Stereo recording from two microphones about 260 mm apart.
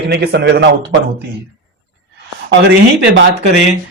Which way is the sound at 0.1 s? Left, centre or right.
Right.